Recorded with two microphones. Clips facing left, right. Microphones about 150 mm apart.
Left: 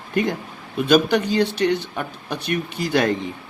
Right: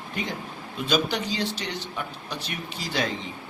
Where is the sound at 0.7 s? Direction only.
60° left (ahead or behind).